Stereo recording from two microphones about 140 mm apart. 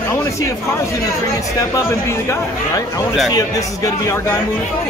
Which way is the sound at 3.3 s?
25° left (ahead or behind).